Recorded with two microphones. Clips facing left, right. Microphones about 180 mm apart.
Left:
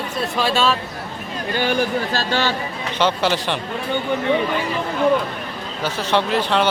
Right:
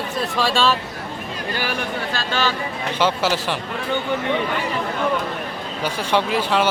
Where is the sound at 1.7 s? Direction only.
30° left (ahead or behind).